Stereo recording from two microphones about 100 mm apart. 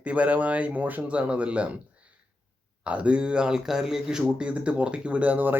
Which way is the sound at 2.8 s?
10° right (ahead or behind).